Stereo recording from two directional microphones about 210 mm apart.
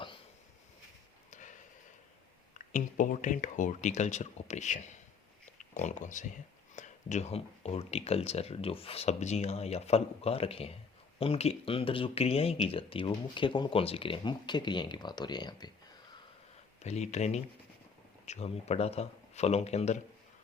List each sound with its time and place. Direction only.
1.3 s a sound: 35° left (ahead or behind)
2.7 s speech: 35° left (ahead or behind); by 15.7 s 20° left (ahead or behind)
16.8 s speech: 30° left (ahead or behind)